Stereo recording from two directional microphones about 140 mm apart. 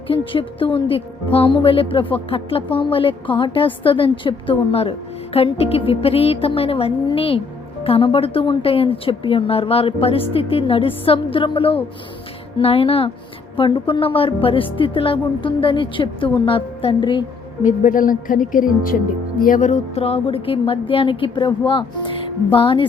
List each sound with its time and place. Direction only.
0.1 s speech: 40° left (ahead or behind)
17.6 s speech: 70° left (ahead or behind); by 22.9 s 35° left (ahead or behind)